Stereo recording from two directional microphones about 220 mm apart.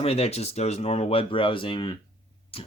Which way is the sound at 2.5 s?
25° left (ahead or behind).